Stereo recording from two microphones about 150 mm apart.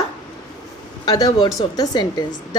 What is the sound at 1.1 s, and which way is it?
A woman's voice, 25° left (ahead or behind).